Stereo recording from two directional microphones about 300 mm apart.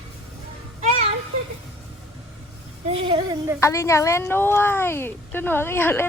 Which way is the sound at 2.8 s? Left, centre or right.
Centre.